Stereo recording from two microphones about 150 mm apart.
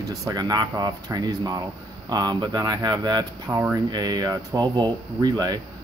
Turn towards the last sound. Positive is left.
turn(degrees=-25)  # may be behind; listen again after turning